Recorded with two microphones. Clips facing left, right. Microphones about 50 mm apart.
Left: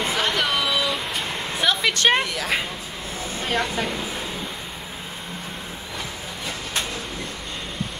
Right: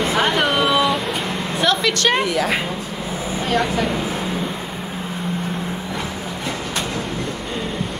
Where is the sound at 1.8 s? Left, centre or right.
Centre.